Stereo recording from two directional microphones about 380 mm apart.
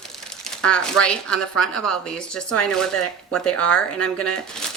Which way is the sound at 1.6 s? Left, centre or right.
Left.